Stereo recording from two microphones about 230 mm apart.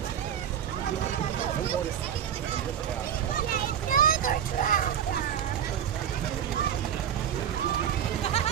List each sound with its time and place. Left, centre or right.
3.5 s vehicle: left